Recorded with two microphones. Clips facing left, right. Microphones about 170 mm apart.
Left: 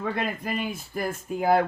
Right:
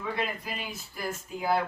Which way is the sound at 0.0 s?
55° left (ahead or behind).